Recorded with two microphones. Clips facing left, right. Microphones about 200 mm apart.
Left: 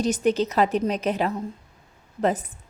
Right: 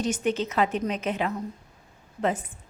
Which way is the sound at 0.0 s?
40° left (ahead or behind).